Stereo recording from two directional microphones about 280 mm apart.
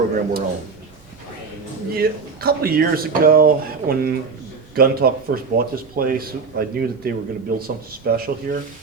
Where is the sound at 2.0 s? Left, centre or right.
Right.